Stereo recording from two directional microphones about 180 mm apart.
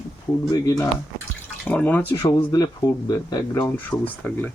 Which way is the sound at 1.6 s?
10° left (ahead or behind).